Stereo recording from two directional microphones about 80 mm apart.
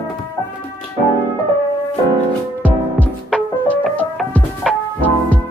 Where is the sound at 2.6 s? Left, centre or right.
Centre.